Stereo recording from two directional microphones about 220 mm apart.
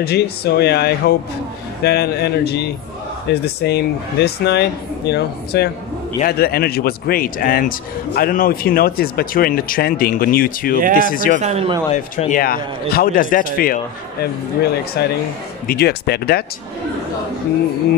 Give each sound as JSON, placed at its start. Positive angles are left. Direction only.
{"t": 0.0, "sound": "a man's voice", "side_deg": 45}
{"t": 11.3, "sound": "speech", "side_deg": -30}
{"t": 11.9, "sound": "a man's voice", "side_deg": 35}
{"t": 15.0, "sound": "speech", "side_deg": 45}